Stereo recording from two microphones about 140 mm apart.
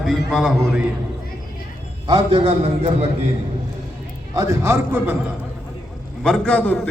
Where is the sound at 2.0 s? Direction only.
35° right (ahead or behind).